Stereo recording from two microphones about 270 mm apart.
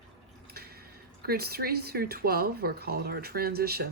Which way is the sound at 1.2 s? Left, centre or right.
Right.